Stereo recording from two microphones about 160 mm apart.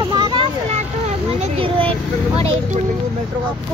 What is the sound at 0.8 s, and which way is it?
Speech, 45° right (ahead or behind).